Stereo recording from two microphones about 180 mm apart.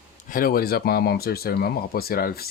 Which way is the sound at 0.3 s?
55° left (ahead or behind).